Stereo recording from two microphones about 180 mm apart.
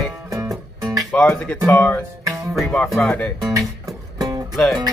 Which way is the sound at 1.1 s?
10° left (ahead or behind).